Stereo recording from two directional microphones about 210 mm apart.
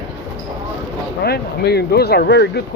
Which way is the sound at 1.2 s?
50° left (ahead or behind).